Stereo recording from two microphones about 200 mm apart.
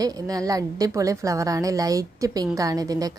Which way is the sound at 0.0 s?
20° right (ahead or behind).